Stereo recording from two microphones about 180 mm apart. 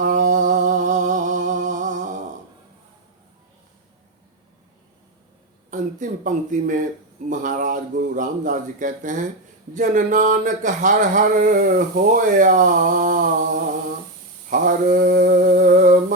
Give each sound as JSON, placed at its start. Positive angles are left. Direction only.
{"t": 0.0, "sound": "a sound", "side_deg": -45}
{"t": 5.7, "sound": "speech", "side_deg": -45}
{"t": 14.5, "sound": "speech", "side_deg": -50}